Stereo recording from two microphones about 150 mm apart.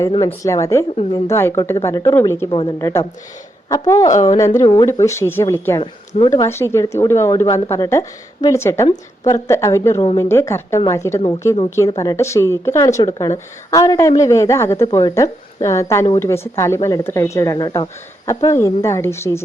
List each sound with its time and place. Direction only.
0.3 s speech: 20° left (ahead or behind)
5.8 s speech: 35° left (ahead or behind)
6.3 s a woman's voice: 20° left (ahead or behind)